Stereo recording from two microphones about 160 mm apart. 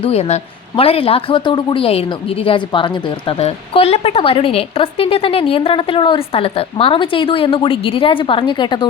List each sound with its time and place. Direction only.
0.0 s speech: 40° left (ahead or behind)